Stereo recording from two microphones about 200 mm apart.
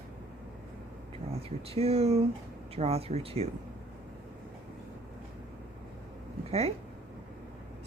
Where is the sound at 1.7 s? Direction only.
30° right (ahead or behind).